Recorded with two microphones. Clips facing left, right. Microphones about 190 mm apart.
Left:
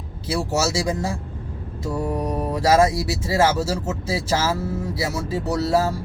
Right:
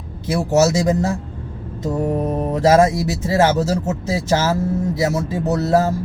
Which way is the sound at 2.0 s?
20° right (ahead or behind).